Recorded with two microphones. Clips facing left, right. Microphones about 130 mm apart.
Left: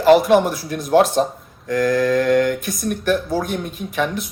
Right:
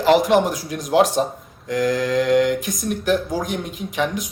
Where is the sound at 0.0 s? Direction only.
20° right (ahead or behind).